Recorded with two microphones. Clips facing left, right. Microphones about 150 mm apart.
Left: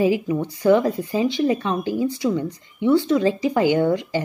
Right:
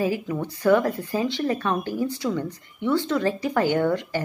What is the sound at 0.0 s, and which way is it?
Speech, 15° left (ahead or behind).